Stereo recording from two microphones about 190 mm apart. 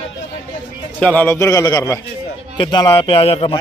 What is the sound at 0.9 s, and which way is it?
Speech, 5° left (ahead or behind).